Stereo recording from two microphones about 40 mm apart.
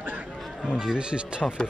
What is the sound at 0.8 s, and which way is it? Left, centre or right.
Speech, right.